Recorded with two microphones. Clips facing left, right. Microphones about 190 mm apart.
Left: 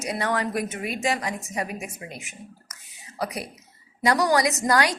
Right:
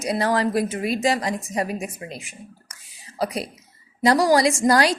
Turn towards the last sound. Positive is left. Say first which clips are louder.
# right 4 dB
turn(degrees=-30)  # may be behind; listen again after turning